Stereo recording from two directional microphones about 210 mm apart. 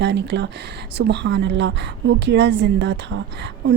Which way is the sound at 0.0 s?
55° right (ahead or behind).